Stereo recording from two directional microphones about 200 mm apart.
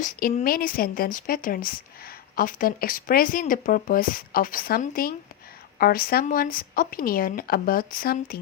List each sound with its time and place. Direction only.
0.0 s a woman's voice: 45° left (ahead or behind)